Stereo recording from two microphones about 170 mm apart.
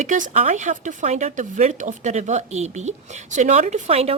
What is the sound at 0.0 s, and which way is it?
Speech, 45° right (ahead or behind).